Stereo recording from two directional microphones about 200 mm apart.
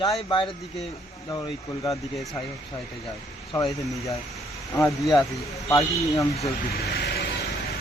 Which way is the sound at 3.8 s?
15° left (ahead or behind).